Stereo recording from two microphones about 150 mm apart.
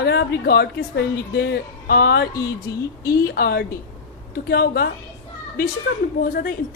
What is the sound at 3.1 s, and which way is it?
Speech, 90° left.